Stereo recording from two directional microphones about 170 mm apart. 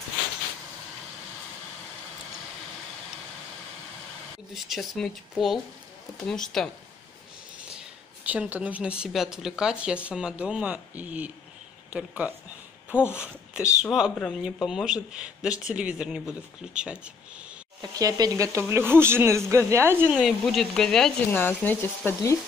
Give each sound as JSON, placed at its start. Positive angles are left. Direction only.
{"t": 4.6, "sound": "speech", "side_deg": 0}
{"t": 8.3, "sound": "a woman's voice", "side_deg": -10}
{"t": 11.9, "sound": "a sound", "side_deg": -10}
{"t": 13.2, "sound": "speech", "side_deg": -5}
{"t": 17.9, "sound": "a woman's voice", "side_deg": -20}
{"t": 20.2, "sound": "speech", "side_deg": 0}